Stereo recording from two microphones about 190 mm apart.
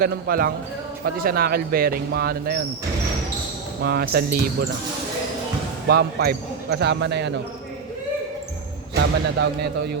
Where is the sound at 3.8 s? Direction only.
55° right (ahead or behind).